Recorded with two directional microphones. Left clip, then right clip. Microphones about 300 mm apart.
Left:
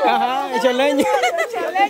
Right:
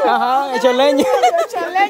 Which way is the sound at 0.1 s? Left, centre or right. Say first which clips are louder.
Right 3 dB; centre.